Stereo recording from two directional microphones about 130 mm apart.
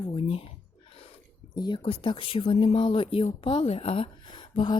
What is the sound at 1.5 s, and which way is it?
A woman's voice, 35° left (ahead or behind).